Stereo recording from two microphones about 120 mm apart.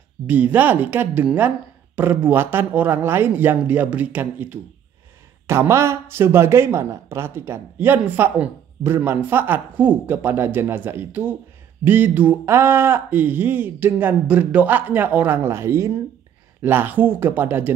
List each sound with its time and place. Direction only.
0.3 s speech: 15° right (ahead or behind)